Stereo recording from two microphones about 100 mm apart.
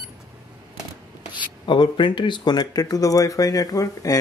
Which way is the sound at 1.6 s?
55° left (ahead or behind).